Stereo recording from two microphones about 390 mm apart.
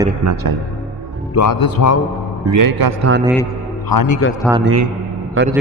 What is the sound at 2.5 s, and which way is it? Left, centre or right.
Speech, right.